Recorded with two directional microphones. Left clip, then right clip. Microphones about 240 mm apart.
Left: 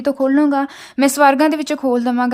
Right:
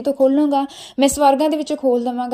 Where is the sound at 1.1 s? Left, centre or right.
Left.